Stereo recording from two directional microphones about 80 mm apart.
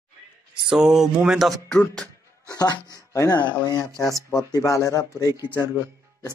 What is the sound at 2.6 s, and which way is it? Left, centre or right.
Speech, left.